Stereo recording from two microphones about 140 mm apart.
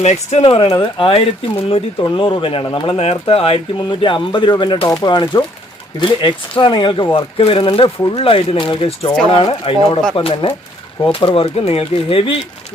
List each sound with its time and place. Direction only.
0.0 s speech: 55° left (ahead or behind)